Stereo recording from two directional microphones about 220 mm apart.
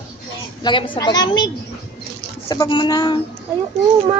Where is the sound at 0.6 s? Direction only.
20° left (ahead or behind).